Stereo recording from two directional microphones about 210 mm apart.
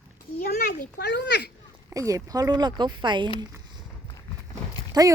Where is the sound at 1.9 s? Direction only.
15° right (ahead or behind).